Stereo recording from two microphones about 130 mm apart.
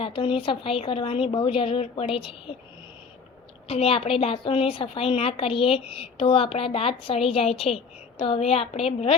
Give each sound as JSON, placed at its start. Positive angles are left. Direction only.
{"t": 0.0, "sound": "a woman's voice", "side_deg": 40}
{"t": 3.7, "sound": "a woman's voice", "side_deg": 45}